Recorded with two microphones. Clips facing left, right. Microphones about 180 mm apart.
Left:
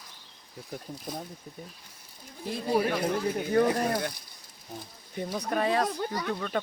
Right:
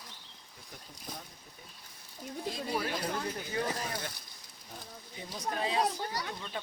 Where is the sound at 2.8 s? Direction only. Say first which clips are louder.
Left 7 dB; 60° left (ahead or behind).